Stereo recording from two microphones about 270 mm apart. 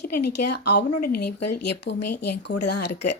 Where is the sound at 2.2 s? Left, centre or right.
Left.